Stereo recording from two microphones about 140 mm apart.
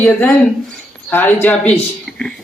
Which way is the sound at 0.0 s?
15° left (ahead or behind).